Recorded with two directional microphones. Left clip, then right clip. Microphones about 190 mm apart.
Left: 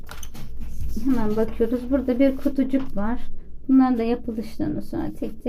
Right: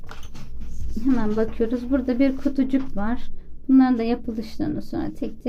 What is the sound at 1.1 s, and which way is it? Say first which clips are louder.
A woman's voice: even; centre (ahead or behind).